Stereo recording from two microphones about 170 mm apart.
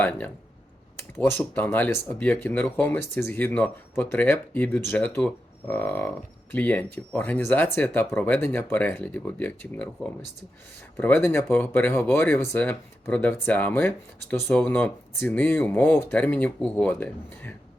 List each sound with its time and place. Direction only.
0.0 s speech: 10° left (ahead or behind)